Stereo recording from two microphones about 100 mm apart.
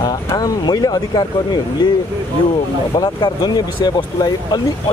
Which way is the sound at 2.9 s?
45° left (ahead or behind).